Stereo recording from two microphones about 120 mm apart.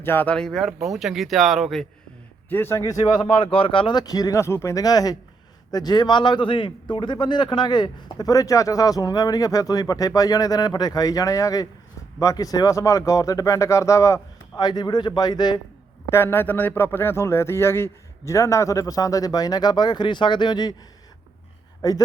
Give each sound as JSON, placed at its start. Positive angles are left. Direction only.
{"t": 0.0, "sound": "speech", "side_deg": 15}
{"t": 0.3, "sound": "speech", "side_deg": 5}
{"t": 2.5, "sound": "a man's voice", "side_deg": 20}
{"t": 16.0, "sound": "a man's voice", "side_deg": 20}
{"t": 21.8, "sound": "a man's voice", "side_deg": 30}